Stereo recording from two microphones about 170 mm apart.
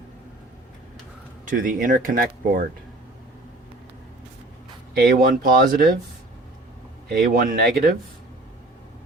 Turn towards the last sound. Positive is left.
turn(degrees=-60)  # may be behind; listen again after turning